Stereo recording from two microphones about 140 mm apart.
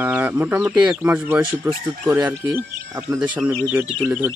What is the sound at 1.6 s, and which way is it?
Speech, 25° right (ahead or behind).